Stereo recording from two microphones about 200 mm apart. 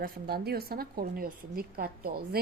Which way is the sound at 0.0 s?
50° right (ahead or behind).